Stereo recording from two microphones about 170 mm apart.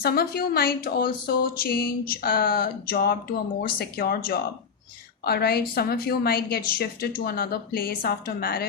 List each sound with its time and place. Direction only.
0.0 s speech: 65° left (ahead or behind)